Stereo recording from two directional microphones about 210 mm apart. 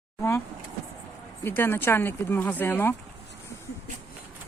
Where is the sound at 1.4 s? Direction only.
10° left (ahead or behind).